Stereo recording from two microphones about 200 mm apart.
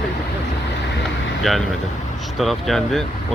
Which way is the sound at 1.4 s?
Centre (ahead or behind).